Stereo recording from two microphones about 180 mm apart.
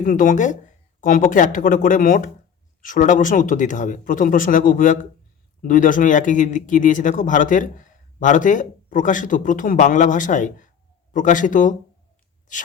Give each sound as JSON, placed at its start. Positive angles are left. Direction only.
{"t": 0.0, "sound": "speech", "side_deg": 45}